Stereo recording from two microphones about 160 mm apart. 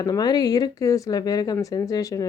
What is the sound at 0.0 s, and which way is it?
Speech, 25° left (ahead or behind).